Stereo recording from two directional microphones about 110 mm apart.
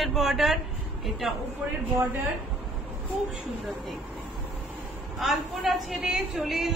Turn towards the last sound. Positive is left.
turn(degrees=0)  # may be behind; listen again after turning